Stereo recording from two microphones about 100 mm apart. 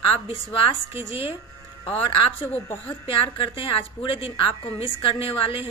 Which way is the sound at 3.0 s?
55° left (ahead or behind).